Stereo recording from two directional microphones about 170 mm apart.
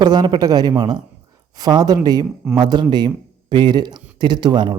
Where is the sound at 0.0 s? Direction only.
25° right (ahead or behind).